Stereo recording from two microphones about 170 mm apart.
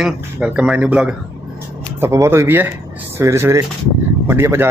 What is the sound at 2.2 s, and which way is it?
Speech, 15° right (ahead or behind).